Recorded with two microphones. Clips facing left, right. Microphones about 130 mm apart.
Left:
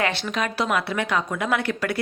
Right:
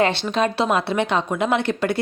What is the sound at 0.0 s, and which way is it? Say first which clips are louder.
A woman's voice: right 6 dB; 25° right (ahead or behind).